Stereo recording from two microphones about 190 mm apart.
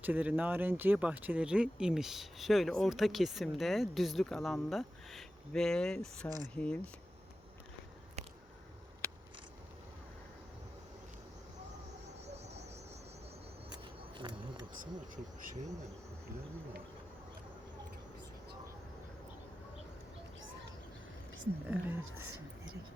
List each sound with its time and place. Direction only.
0.0 s speech: 10° right (ahead or behind)
6.2 s speech: 15° left (ahead or behind)
14.2 s bee: 25° right (ahead or behind)
14.8 s speech: 45° right (ahead or behind)
21.7 s speech: 10° right (ahead or behind)